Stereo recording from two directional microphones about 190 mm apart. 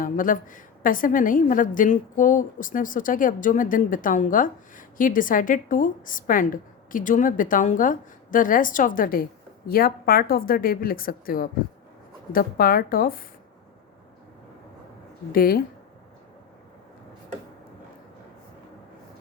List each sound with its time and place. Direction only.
0.0 s a woman's voice: 45° left (ahead or behind)
15.3 s a woman's voice: 50° left (ahead or behind)